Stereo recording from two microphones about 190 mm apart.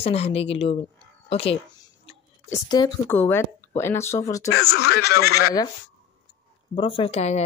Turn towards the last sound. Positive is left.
turn(degrees=35)  # may be behind; listen again after turning